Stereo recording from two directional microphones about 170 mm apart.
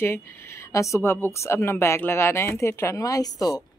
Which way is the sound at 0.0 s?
15° left (ahead or behind).